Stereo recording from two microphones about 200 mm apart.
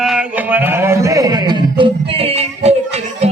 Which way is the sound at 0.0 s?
5° right (ahead or behind).